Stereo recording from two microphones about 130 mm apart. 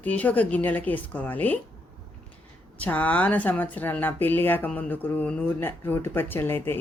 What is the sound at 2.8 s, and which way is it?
Speech, 10° left (ahead or behind).